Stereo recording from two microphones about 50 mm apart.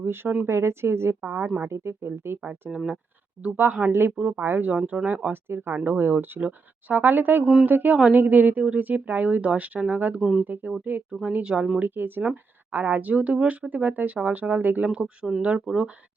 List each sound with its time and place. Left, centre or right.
0.0 s speech: right
0.4 s speech: right
2.6 s speech: right
3.6 s speech: right
4.7 s speech: right
10.2 s speech: centre
10.4 s speech: right
11.8 s speech: right
14.9 s speech: right